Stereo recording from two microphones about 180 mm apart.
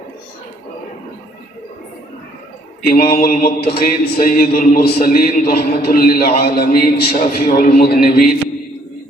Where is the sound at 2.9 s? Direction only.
55° left (ahead or behind).